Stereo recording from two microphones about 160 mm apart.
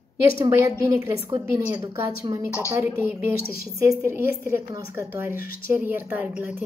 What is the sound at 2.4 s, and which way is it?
Speech, 15° left (ahead or behind).